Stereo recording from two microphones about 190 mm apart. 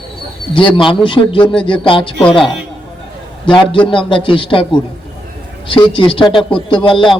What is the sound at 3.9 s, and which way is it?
Speech, 25° left (ahead or behind).